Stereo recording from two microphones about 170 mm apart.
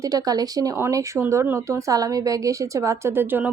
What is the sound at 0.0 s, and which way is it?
A woman's voice, 20° right (ahead or behind).